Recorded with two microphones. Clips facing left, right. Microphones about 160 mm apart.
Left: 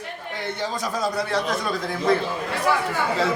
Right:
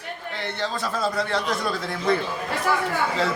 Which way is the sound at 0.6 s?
15° left (ahead or behind).